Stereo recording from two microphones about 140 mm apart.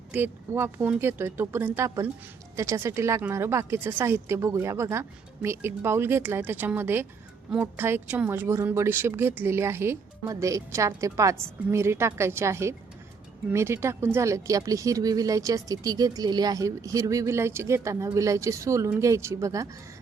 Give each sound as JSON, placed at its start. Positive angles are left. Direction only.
{"t": 0.1, "sound": "speech", "side_deg": -15}